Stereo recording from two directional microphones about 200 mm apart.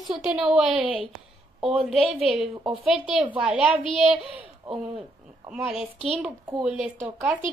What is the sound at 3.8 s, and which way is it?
Speech, 25° left (ahead or behind).